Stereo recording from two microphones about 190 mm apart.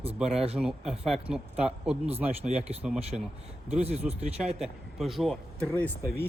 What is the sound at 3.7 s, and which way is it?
Speech, 35° right (ahead or behind).